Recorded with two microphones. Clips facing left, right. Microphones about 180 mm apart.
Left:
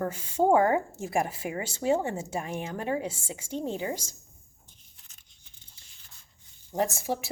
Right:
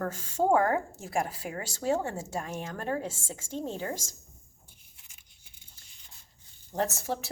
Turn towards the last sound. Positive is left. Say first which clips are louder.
# left 2 dB
turn(degrees=10)  # may be behind; listen again after turning